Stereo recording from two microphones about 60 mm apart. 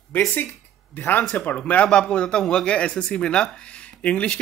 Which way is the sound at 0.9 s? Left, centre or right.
Left.